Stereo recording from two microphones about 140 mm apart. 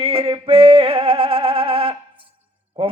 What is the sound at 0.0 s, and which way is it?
Music, 40° right (ahead or behind).